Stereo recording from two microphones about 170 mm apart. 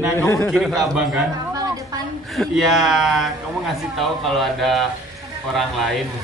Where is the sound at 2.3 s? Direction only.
Centre (ahead or behind).